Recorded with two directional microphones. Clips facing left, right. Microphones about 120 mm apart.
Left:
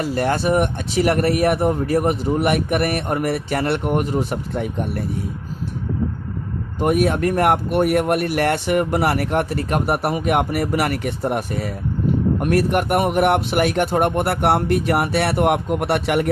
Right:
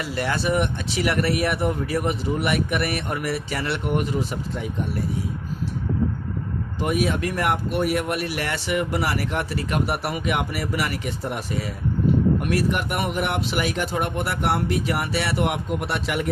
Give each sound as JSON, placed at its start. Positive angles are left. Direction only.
{"t": 0.0, "sound": "speech", "side_deg": 45}
{"t": 6.7, "sound": "speech", "side_deg": 50}